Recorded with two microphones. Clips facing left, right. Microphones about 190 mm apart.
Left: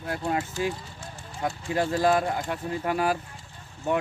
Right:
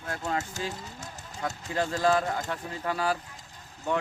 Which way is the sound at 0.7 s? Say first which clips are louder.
Even; 40° right (ahead or behind).